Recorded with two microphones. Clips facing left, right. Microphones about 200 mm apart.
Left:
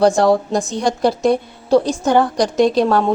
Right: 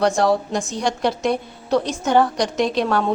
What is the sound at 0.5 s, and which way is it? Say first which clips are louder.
A woman's voice: left 4 dB; 35° left (ahead or behind).